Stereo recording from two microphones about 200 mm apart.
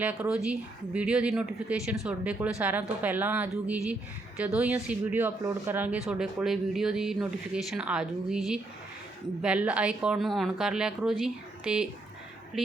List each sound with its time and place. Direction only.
0.0 s speech: 5° right (ahead or behind)